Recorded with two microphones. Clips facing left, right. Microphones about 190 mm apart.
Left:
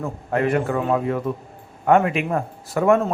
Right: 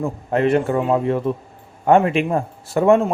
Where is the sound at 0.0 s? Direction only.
25° right (ahead or behind).